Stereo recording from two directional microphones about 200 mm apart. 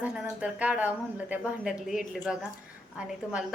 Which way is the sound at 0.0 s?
5° right (ahead or behind).